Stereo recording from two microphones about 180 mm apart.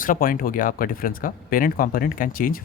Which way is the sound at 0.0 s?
50° left (ahead or behind).